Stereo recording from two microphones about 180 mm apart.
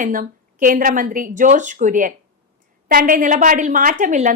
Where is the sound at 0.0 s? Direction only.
50° right (ahead or behind).